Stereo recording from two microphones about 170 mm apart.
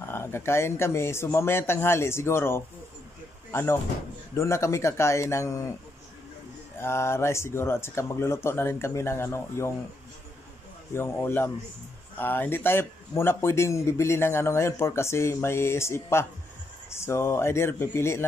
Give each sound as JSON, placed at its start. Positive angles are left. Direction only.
{"t": 0.1, "sound": "a man's voice", "side_deg": 15}
{"t": 6.8, "sound": "a man's voice", "side_deg": 15}
{"t": 10.9, "sound": "a man's voice", "side_deg": 15}